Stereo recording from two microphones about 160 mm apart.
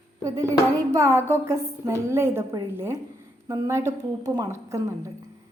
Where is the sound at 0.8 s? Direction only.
20° right (ahead or behind).